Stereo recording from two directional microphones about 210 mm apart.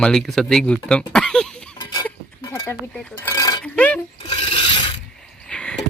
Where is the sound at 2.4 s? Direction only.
15° left (ahead or behind).